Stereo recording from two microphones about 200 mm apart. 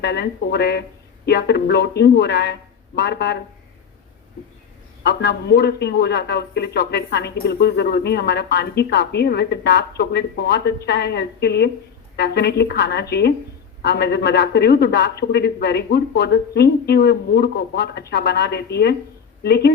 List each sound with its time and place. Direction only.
0.0 s a man's voice: 55° left (ahead or behind)
5.0 s a man's voice: 55° left (ahead or behind)